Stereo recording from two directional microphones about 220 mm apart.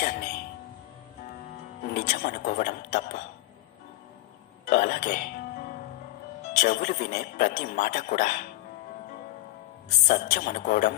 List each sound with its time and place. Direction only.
0.0 s a sound: 50° left (ahead or behind)
1.8 s speech: 35° left (ahead or behind)
4.6 s speech: 35° left (ahead or behind)
6.5 s speech: 35° left (ahead or behind)
9.8 s speech: 35° left (ahead or behind)